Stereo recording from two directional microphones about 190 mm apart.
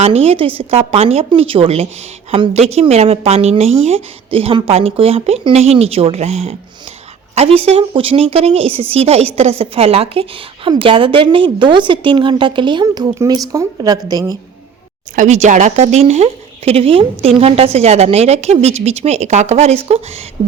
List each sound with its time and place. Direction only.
0.0 s a woman's voice: 35° right (ahead or behind)
15.1 s speech: 40° right (ahead or behind)